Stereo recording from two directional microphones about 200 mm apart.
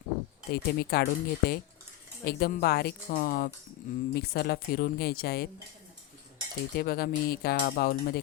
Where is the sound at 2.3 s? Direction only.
50° left (ahead or behind).